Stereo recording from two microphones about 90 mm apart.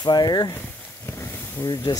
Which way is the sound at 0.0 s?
50° left (ahead or behind).